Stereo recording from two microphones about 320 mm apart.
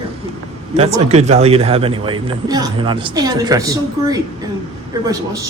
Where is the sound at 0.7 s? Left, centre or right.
Centre.